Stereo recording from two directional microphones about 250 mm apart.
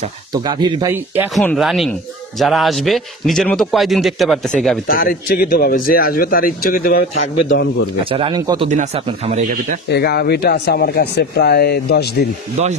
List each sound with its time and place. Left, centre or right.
0.3 s speech: centre
4.8 s speech: left
8.0 s speech: right
9.8 s speech: left
12.6 s speech: right